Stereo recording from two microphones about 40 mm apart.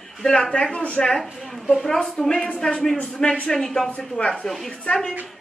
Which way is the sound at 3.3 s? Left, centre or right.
Centre.